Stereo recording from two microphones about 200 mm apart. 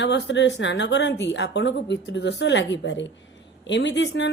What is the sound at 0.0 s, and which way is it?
A woman's voice, 60° left (ahead or behind).